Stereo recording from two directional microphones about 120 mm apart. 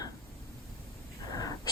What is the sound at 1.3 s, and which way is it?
Wheeze, 30° left (ahead or behind).